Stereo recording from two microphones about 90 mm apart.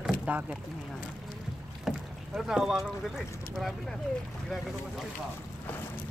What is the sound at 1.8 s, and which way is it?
Speech, 5° right (ahead or behind).